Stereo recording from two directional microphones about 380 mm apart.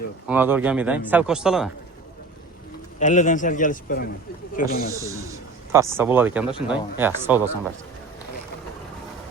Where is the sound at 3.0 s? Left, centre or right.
Centre.